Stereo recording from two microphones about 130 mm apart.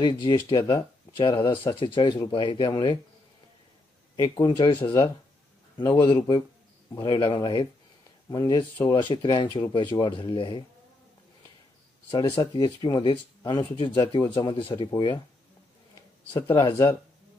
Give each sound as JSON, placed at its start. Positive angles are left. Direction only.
{"t": 0.0, "sound": "speech", "side_deg": 35}
{"t": 4.2, "sound": "speech", "side_deg": 35}
{"t": 12.1, "sound": "speech", "side_deg": 35}